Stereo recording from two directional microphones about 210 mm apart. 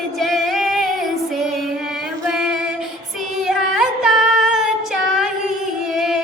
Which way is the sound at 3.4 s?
Centre (ahead or behind).